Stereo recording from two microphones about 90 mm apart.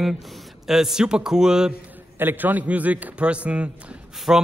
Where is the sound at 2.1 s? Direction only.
20° right (ahead or behind).